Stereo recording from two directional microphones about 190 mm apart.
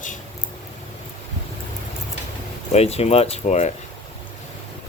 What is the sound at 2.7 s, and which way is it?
Speech, 35° left (ahead or behind).